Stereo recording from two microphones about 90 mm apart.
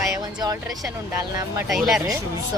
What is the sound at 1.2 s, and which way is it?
Speech, 35° right (ahead or behind).